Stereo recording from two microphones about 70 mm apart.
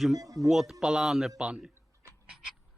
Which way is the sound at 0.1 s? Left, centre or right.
Right.